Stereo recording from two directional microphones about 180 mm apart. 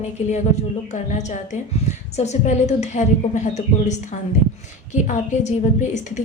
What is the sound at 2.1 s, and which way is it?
A woman's voice, 40° left (ahead or behind).